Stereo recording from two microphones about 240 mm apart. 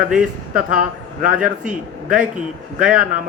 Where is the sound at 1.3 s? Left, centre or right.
Centre.